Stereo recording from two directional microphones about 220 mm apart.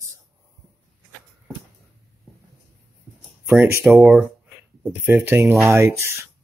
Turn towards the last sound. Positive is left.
turn(degrees=0)  # may be behind; listen again after turning